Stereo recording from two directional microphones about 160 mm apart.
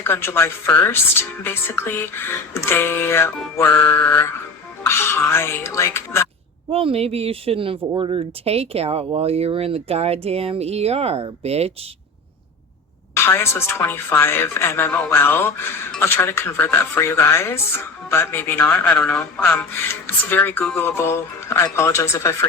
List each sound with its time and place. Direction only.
0.0 s a woman's voice: 15° left (ahead or behind)
6.7 s speech: 35° right (ahead or behind)
13.1 s a woman's voice: 15° left (ahead or behind)